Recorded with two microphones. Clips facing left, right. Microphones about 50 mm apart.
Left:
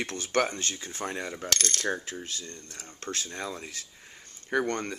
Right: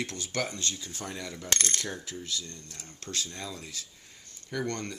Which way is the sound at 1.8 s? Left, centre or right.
Left.